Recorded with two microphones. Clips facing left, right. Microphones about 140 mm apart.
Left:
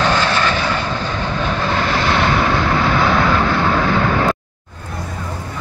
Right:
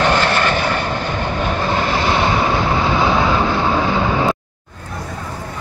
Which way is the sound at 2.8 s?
25° right (ahead or behind).